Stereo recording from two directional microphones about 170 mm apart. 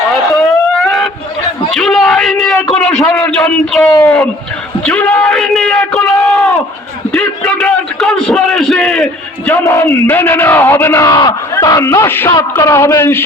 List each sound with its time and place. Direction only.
0.3 s a sound: centre (ahead or behind)
1.7 s a man's voice: 5° left (ahead or behind)
9.5 s a man's voice: 15° left (ahead or behind)